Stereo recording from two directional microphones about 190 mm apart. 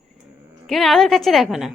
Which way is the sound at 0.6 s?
Centre (ahead or behind).